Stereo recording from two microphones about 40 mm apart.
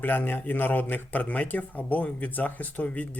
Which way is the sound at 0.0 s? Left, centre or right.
Left.